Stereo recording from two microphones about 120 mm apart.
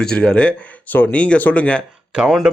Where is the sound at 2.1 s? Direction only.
5° right (ahead or behind).